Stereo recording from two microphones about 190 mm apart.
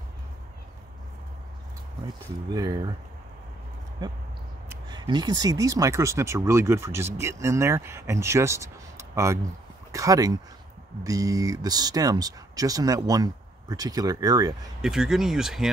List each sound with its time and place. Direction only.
2.5 s speech: 20° right (ahead or behind)
4.0 s speech: 20° right (ahead or behind)
14.8 s speech: 5° right (ahead or behind)